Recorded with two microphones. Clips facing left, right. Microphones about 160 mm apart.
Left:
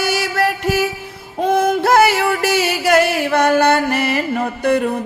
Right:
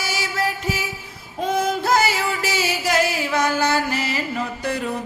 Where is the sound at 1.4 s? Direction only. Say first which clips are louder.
Left 6 dB; 60° left (ahead or behind).